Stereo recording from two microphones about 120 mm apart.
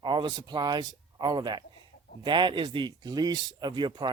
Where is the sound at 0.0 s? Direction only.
40° right (ahead or behind).